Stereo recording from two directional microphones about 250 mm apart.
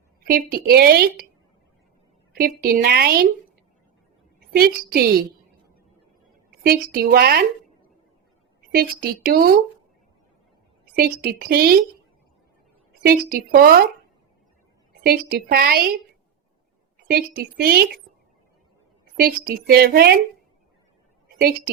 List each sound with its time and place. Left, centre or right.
0.2 s a sound: right
0.5 s speech: right
2.3 s speech: right
4.5 s speech: right
6.6 s speech: right
8.7 s speech: right
10.9 s speech: right
13.0 s speech: right
15.0 s speech: right
17.1 s speech: right
19.1 s speech: right